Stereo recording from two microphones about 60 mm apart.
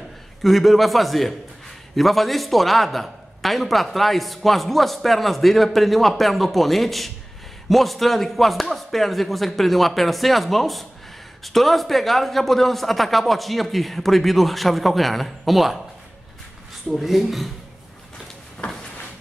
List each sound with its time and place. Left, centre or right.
0.4 s a man's voice: centre
16.9 s a man's voice: centre
18.6 s drawer open or close: left